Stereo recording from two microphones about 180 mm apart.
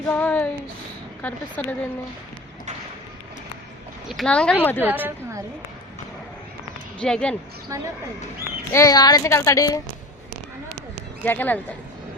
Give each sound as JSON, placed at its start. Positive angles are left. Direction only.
{"t": 0.1, "sound": "speech", "side_deg": 10}
{"t": 4.1, "sound": "speech", "side_deg": 5}
{"t": 4.8, "sound": "a woman's voice", "side_deg": -10}
{"t": 7.0, "sound": "speech", "side_deg": 5}
{"t": 7.7, "sound": "speech", "side_deg": -15}
{"t": 8.7, "sound": "a child's voice", "side_deg": 20}
{"t": 11.2, "sound": "speech", "side_deg": 10}